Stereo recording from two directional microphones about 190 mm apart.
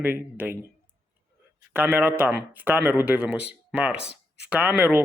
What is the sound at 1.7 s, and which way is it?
Speech, 10° right (ahead or behind).